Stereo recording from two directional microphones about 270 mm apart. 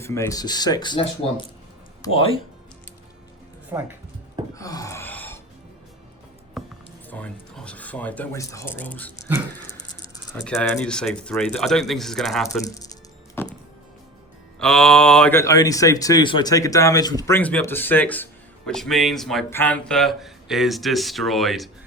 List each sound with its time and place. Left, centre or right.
0.0 s speech: centre
3.7 s speech: centre
4.5 s gasp: centre
6.6 s music: centre
7.1 s speech: centre
12.6 s music: centre
14.6 s speech: centre